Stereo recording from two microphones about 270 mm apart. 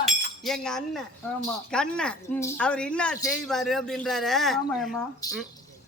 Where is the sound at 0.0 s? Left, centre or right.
Centre.